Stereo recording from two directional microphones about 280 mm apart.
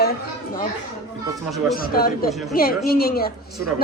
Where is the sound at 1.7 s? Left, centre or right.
Left.